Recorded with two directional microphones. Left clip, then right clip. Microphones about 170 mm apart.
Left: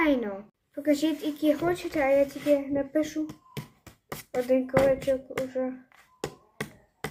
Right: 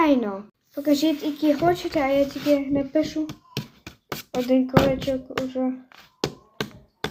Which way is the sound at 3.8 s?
20° right (ahead or behind).